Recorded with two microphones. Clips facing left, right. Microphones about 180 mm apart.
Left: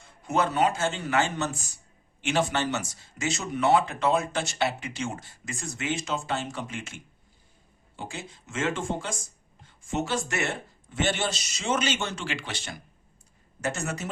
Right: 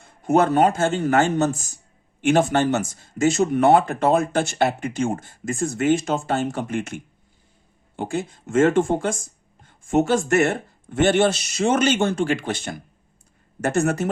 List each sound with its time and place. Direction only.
0.0 s speech: 50° right (ahead or behind)